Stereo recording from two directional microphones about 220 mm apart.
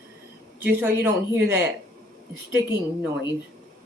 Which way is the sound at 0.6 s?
10° right (ahead or behind).